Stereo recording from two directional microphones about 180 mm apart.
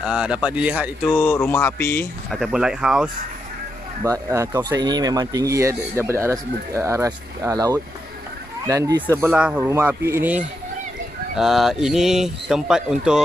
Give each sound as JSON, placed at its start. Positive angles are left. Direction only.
{"t": 0.0, "sound": "speech", "side_deg": -5}
{"t": 1.1, "sound": "speech", "side_deg": 10}
{"t": 2.3, "sound": "speech", "side_deg": 0}
{"t": 4.0, "sound": "speech", "side_deg": -15}